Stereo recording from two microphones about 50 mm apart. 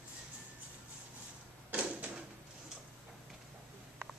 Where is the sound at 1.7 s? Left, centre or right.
Right.